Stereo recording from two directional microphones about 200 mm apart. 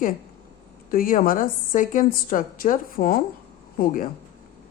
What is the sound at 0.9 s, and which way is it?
Speech, 45° left (ahead or behind).